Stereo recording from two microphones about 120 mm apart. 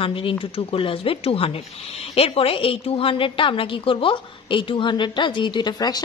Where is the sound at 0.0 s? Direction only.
45° left (ahead or behind).